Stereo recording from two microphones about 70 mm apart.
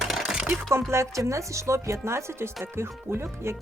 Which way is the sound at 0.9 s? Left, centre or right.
Right.